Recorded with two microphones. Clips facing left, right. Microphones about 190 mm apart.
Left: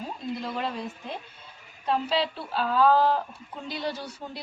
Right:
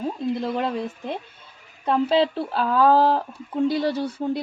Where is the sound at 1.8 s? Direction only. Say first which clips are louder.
Right 7 dB; 55° right (ahead or behind).